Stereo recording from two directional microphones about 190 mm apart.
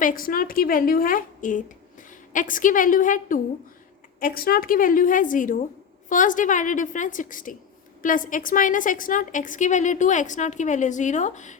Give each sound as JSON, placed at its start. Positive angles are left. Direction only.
{"t": 0.0, "sound": "a woman's voice", "side_deg": 45}